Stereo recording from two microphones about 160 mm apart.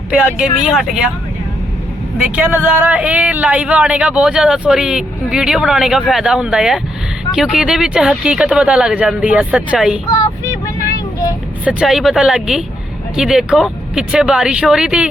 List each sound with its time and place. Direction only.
0.3 s speech: 5° right (ahead or behind)
2.2 s speech: 10° right (ahead or behind)
10.8 s vehicle: 20° left (ahead or behind)
11.6 s speech: 5° right (ahead or behind)